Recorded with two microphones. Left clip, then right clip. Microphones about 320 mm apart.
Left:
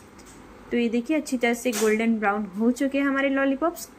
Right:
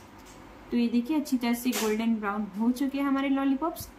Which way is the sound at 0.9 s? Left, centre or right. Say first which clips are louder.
Left 3 dB; centre.